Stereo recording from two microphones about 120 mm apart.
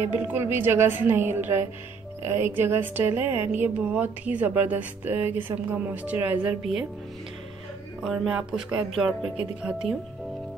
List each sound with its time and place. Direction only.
0.2 s a woman's voice: 15° right (ahead or behind)
8.0 s music: 5° right (ahead or behind)